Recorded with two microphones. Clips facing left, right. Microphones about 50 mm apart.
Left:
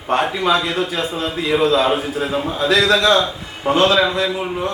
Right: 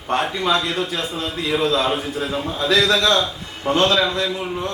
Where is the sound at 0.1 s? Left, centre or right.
Centre.